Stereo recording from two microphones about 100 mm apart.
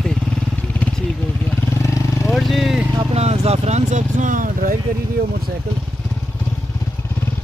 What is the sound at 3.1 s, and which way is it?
Vehicle, 90° right.